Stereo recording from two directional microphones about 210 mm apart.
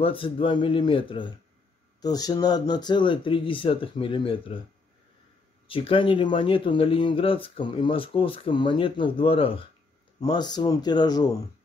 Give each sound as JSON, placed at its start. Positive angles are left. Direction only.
{"t": 0.0, "sound": "speech", "side_deg": 25}
{"t": 5.7, "sound": "speech", "side_deg": 25}